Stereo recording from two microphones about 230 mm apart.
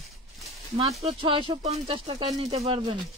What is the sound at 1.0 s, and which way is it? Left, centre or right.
A woman's voice, right.